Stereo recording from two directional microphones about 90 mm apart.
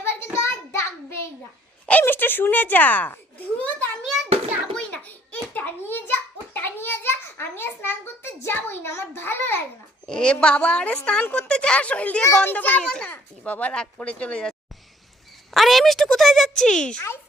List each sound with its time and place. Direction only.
0.4 s child singing: 35° left (ahead or behind)
1.9 s a child's voice: 20° left (ahead or behind)
4.0 s a sound: centre (ahead or behind)
4.7 s a sound: 15° left (ahead or behind)
10.1 s a woman's voice: 10° left (ahead or behind)
15.5 s speech: centre (ahead or behind)